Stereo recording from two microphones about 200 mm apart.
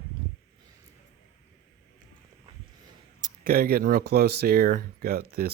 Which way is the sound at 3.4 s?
50° right (ahead or behind).